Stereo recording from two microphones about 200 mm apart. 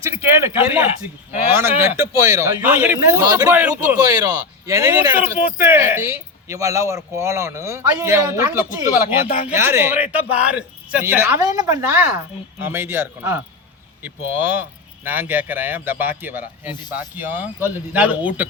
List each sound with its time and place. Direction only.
0.0 s speech: 10° right (ahead or behind)
5.4 s speech: 40° left (ahead or behind)
5.6 s speech: 10° right (ahead or behind)